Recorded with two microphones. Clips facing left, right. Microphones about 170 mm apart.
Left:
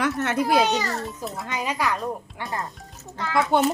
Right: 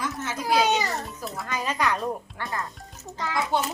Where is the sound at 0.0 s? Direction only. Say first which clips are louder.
Left 7 dB; 65° left (ahead or behind).